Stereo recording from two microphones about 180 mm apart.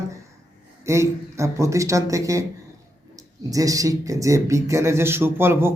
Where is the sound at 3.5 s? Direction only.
20° right (ahead or behind).